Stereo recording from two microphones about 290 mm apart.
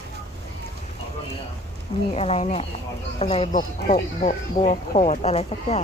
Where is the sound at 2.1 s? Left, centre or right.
Left.